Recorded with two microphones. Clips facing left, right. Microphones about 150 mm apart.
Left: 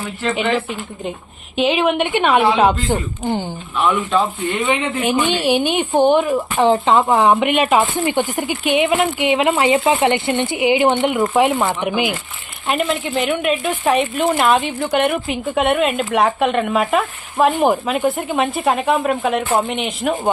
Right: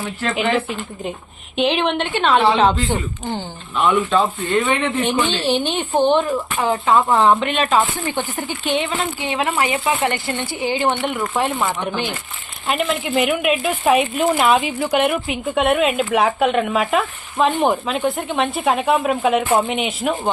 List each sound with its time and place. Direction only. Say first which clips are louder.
0.2 s speech: left 1 dB; centre (ahead or behind)
6.3 s speech: left 5 dB; 25° left (ahead or behind)
12.6 s speech: left 1 dB; centre (ahead or behind)